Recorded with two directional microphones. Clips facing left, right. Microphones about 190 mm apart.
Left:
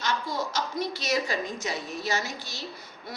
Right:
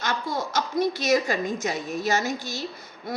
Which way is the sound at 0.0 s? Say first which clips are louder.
Right 2 dB; 50° right (ahead or behind).